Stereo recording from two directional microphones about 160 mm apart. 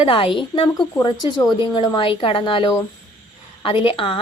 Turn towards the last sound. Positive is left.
turn(degrees=35)  # may be behind; listen again after turning